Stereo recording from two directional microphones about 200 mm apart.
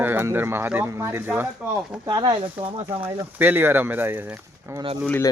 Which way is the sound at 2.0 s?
20° right (ahead or behind).